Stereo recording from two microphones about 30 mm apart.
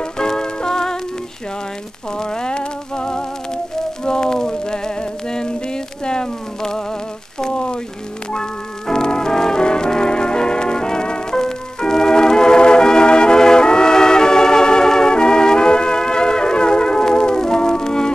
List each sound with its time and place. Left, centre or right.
0.0 s music: left
2.1 s music: left
7.5 s a sound: left
8.3 s brass instrument: left
11.3 s music: centre